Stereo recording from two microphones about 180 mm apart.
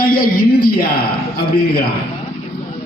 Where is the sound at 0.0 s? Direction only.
55° left (ahead or behind).